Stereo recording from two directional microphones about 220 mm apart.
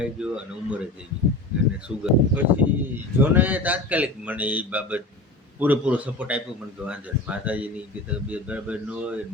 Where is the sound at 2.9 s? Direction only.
10° right (ahead or behind).